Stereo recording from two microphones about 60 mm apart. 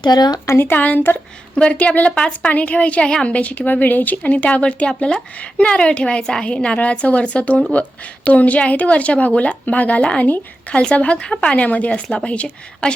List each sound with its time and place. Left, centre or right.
0.4 s speech: left
1.5 s a woman's voice: centre